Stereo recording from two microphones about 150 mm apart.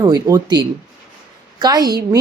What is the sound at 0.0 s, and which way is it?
A woman's voice, 25° right (ahead or behind).